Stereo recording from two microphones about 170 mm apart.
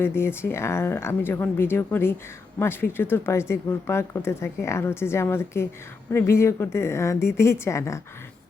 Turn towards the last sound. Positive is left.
turn(degrees=15)  # may be behind; listen again after turning